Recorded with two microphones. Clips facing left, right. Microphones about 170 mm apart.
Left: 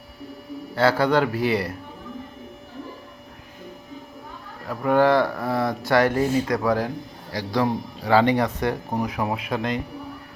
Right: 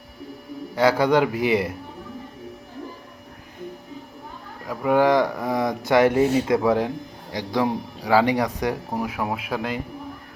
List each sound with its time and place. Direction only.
0.8 s speech: 15° right (ahead or behind)
4.6 s speech: 10° right (ahead or behind)